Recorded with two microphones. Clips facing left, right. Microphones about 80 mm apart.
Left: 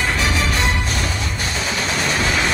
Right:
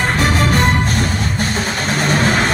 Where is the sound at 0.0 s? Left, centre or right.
Right.